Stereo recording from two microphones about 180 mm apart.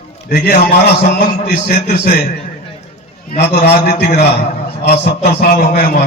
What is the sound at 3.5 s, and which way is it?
A man's voice, 65° left (ahead or behind).